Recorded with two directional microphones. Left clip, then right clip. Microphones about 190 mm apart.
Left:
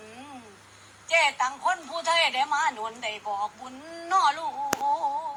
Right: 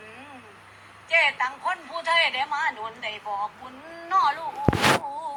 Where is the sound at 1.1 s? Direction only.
60° left (ahead or behind).